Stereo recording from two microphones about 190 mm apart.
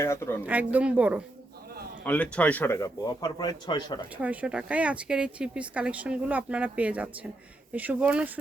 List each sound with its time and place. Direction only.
0.0 s a man's voice: 15° left (ahead or behind)
0.4 s speech: 10° right (ahead or behind)
2.0 s a man's voice: 5° left (ahead or behind); by 3.9 s 25° left (ahead or behind)
4.2 s speech: 5° right (ahead or behind)